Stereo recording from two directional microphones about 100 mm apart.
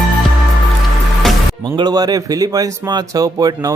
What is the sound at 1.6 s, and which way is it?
A man's voice, 50° right (ahead or behind).